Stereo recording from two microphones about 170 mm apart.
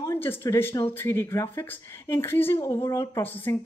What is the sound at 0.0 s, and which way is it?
Speech, 15° left (ahead or behind).